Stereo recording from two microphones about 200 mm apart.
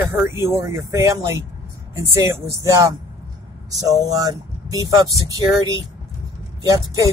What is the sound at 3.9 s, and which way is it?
Speech, 15° right (ahead or behind).